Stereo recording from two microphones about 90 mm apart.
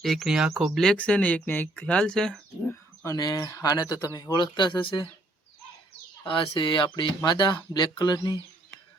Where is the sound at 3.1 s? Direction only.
50° left (ahead or behind); by 5.1 s 70° left (ahead or behind).